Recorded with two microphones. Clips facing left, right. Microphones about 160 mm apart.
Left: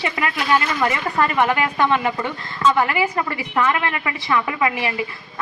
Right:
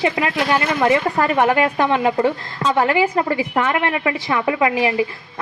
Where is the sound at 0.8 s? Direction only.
30° right (ahead or behind).